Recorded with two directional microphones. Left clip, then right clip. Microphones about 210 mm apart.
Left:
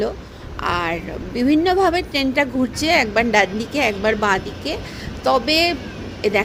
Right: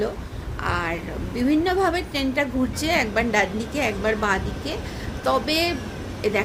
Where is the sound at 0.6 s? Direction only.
35° left (ahead or behind).